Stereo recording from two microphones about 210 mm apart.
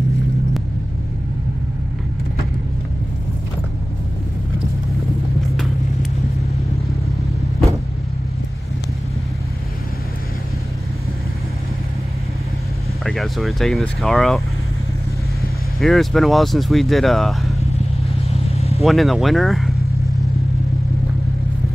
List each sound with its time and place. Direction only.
13.0 s speech: centre (ahead or behind)
15.8 s speech: centre (ahead or behind)
18.5 s vehicle: 30° left (ahead or behind)
18.8 s speech: centre (ahead or behind)